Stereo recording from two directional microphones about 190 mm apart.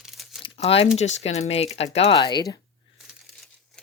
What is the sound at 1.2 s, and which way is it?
Speech, 35° left (ahead or behind).